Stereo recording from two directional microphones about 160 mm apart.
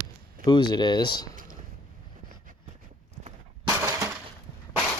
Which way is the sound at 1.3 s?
55° right (ahead or behind).